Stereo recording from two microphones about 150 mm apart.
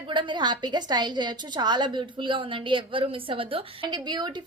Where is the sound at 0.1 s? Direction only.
30° right (ahead or behind).